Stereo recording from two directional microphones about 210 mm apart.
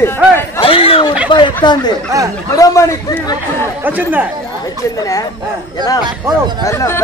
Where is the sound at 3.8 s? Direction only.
10° right (ahead or behind).